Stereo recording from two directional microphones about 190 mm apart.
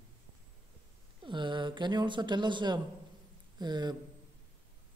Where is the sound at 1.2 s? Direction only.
25° right (ahead or behind).